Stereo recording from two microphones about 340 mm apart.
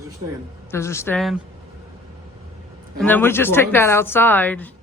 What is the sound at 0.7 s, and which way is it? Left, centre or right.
Speech, centre.